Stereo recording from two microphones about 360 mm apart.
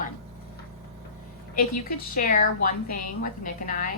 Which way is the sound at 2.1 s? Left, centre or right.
Left.